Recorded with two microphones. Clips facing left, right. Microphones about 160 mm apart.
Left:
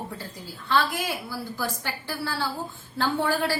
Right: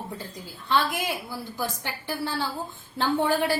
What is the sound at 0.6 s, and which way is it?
A woman's voice, 20° right (ahead or behind).